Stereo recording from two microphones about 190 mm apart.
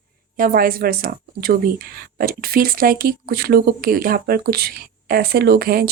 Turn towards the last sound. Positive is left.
turn(degrees=-55)  # may be behind; listen again after turning